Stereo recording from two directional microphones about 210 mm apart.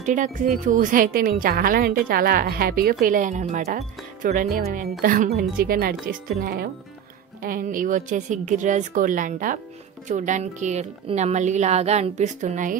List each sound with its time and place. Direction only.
0.0 s a woman's voice: 35° right (ahead or behind)